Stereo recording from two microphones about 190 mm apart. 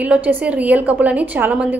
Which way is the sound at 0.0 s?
10° right (ahead or behind).